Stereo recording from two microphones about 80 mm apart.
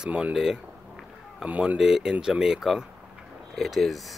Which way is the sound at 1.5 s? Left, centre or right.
Centre.